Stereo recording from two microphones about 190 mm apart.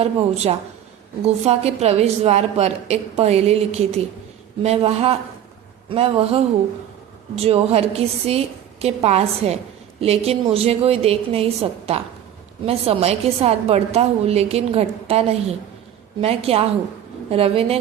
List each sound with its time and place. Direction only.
0.0 s a woman's voice: 35° right (ahead or behind)